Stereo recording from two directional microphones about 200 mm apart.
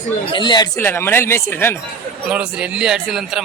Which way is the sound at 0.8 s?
10° left (ahead or behind).